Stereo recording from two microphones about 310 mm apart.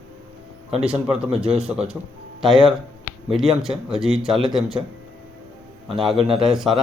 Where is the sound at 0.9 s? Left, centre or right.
Centre.